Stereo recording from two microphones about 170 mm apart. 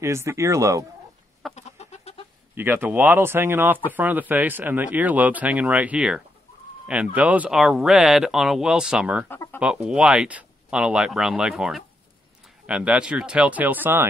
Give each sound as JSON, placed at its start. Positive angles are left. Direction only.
{"t": 0.0, "sound": "speech", "side_deg": -15}
{"t": 1.5, "sound": "goat", "side_deg": 40}
{"t": 2.5, "sound": "speech", "side_deg": -10}
{"t": 9.3, "sound": "chicken", "side_deg": 10}
{"t": 9.6, "sound": "speech", "side_deg": -5}